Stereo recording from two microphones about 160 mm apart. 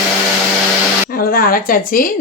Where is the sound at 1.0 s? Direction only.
65° left (ahead or behind).